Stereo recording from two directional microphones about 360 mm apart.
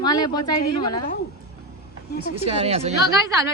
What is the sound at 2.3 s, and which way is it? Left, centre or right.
Speech, centre.